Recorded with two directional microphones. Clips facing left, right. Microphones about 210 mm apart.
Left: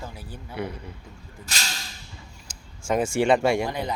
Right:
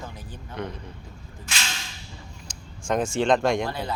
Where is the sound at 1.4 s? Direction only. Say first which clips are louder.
Right 1 dB; 40° left (ahead or behind).